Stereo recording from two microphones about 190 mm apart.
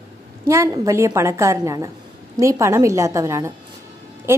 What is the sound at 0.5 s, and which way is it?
A woman's voice, 15° right (ahead or behind).